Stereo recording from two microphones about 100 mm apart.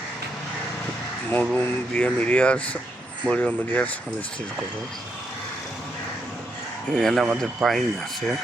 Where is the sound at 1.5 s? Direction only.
20° left (ahead or behind).